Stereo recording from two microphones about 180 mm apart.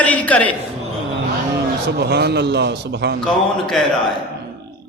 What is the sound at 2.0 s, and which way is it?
A man's voice, 65° right (ahead or behind).